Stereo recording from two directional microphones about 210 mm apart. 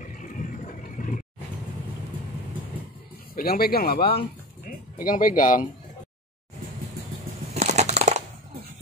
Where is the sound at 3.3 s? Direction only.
45° left (ahead or behind).